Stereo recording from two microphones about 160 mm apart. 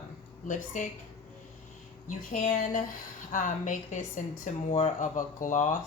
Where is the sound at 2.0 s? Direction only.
55° left (ahead or behind).